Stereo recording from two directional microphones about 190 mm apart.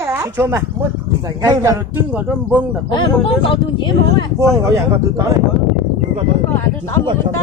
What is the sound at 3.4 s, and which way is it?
Speech, 25° left (ahead or behind).